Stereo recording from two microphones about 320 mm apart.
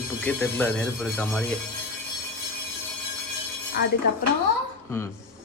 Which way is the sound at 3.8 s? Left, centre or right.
Left.